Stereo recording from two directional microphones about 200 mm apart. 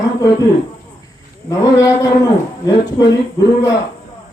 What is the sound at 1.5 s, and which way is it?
Speech, 15° left (ahead or behind).